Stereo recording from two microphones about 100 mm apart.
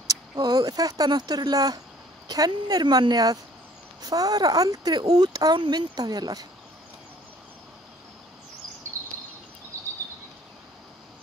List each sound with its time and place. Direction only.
0.0 s speech: 35° right (ahead or behind)